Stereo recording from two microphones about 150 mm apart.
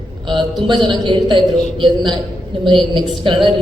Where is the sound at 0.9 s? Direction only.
30° right (ahead or behind).